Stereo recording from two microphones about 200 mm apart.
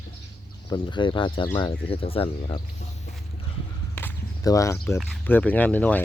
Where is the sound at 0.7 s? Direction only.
25° left (ahead or behind).